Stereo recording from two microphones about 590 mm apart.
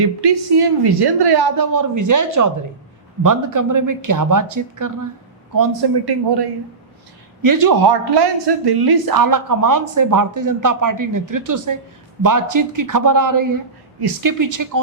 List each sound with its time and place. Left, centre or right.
0.0 s speech: right
6.1 s speech: right